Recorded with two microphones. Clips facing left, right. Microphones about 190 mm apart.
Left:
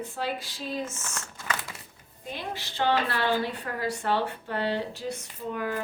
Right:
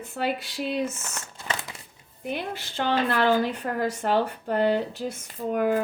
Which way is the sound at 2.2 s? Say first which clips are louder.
Right 5 dB; 55° right (ahead or behind).